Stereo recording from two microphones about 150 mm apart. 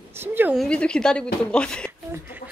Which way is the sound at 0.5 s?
5° left (ahead or behind).